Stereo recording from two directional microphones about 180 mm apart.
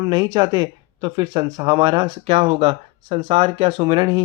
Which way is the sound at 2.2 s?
35° right (ahead or behind).